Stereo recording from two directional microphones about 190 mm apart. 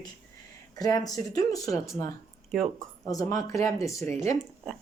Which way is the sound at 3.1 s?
15° left (ahead or behind).